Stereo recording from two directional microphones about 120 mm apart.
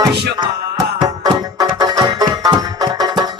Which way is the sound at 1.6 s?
35° right (ahead or behind).